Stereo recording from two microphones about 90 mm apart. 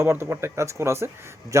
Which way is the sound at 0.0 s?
25° right (ahead or behind).